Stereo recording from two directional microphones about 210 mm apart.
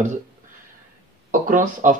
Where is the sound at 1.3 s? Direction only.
40° right (ahead or behind).